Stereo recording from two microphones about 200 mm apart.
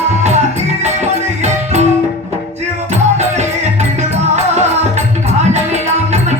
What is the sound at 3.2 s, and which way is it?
Music, 35° right (ahead or behind).